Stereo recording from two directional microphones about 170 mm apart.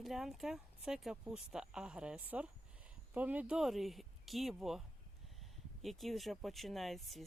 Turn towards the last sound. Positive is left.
turn(degrees=0)  # may be behind; listen again after turning